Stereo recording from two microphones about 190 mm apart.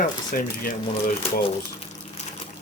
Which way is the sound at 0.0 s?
45° left (ahead or behind).